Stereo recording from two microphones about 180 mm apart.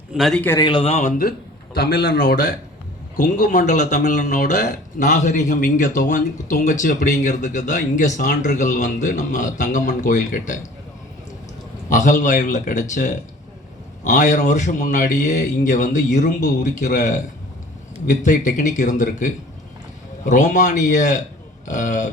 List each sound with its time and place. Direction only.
0.1 s a man's voice: centre (ahead or behind)
0.6 s speech: 30° left (ahead or behind)
2.1 s speech: 50° left (ahead or behind)
11.9 s speech: 45° left (ahead or behind)